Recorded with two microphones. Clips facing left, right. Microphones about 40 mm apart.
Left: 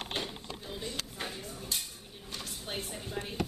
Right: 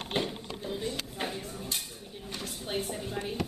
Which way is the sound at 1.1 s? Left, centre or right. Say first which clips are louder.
Right 4 dB; centre.